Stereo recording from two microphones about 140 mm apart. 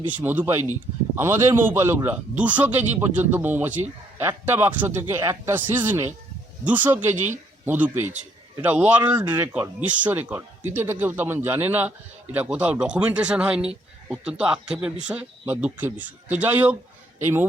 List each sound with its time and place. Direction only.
0.1 s speech: 10° right (ahead or behind)